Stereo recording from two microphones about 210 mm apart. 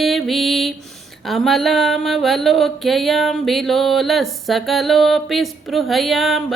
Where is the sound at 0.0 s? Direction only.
Centre (ahead or behind).